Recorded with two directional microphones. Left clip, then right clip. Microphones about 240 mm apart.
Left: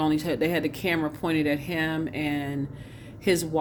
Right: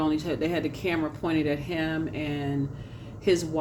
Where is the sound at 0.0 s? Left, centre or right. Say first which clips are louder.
Left 2 dB; left.